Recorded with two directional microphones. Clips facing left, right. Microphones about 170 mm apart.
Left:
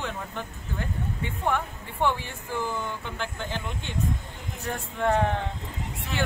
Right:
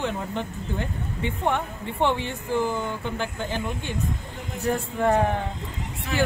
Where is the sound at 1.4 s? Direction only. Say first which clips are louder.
Right 1 dB; 20° right (ahead or behind).